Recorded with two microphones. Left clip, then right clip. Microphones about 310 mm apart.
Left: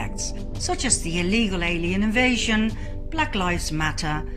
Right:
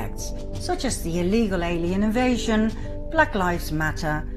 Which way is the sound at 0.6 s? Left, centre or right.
Centre.